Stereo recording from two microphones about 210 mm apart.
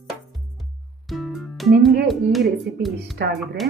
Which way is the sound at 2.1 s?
Centre (ahead or behind).